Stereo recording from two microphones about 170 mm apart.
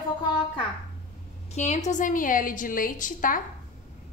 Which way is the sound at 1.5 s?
45° left (ahead or behind).